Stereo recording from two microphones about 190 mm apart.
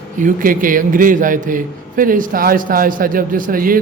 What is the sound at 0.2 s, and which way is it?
A man's voice, 45° right (ahead or behind).